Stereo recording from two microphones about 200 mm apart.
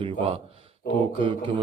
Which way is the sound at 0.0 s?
25° right (ahead or behind).